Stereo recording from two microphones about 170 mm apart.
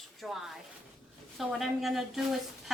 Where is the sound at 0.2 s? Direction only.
Centre (ahead or behind).